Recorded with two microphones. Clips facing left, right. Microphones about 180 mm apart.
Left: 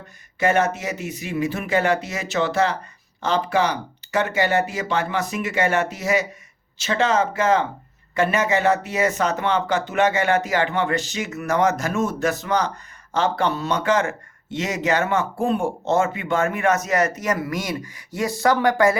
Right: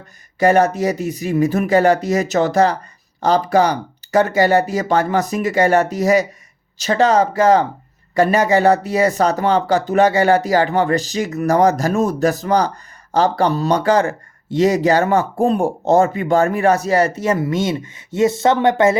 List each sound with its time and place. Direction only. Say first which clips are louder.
0.3 s speech: right 6 dB; 35° right (ahead or behind)